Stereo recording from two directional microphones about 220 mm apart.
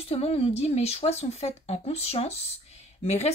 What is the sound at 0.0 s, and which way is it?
Speech, 25° left (ahead or behind).